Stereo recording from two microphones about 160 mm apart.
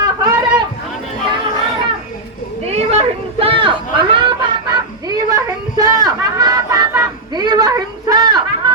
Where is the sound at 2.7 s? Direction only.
40° right (ahead or behind).